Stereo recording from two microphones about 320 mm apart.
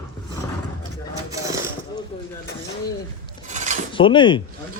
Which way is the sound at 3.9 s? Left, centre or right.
Centre.